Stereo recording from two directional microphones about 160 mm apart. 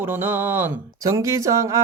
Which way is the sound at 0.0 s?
10° right (ahead or behind).